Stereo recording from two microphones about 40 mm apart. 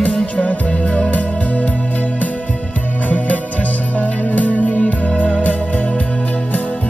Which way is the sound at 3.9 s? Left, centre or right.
Left.